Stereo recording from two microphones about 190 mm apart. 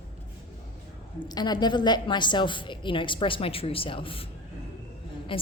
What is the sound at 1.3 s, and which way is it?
A woman's voice, 20° left (ahead or behind).